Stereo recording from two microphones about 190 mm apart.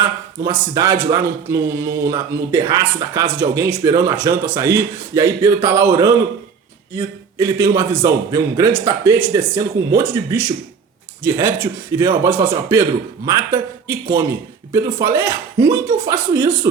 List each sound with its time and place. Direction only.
0.4 s a man's voice: 15° right (ahead or behind)